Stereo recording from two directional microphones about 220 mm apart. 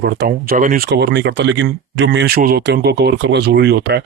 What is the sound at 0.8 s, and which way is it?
Speech, 50° right (ahead or behind).